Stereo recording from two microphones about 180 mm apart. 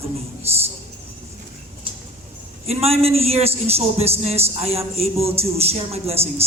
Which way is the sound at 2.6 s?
35° right (ahead or behind).